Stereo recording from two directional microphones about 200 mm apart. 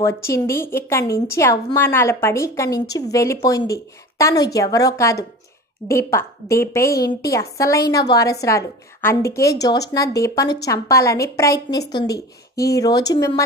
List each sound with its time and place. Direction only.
0.0 s a woman's voice: 15° left (ahead or behind)